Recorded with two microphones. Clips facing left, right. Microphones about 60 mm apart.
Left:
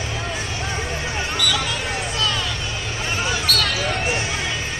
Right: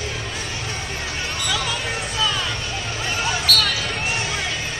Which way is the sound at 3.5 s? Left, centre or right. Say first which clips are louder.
Right 3 dB; left.